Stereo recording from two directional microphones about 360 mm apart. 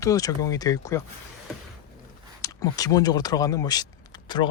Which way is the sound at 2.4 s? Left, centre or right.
Centre.